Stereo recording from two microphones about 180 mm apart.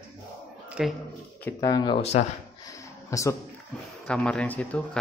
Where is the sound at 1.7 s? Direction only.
25° left (ahead or behind).